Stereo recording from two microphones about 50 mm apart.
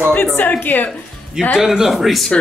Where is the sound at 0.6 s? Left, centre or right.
Left.